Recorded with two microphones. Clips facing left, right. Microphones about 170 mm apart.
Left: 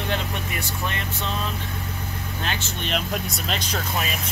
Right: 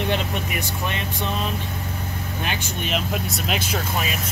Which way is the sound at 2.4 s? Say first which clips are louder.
Right 1 dB; 5° right (ahead or behind).